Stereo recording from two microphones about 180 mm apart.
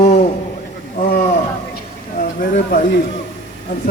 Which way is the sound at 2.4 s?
50° left (ahead or behind).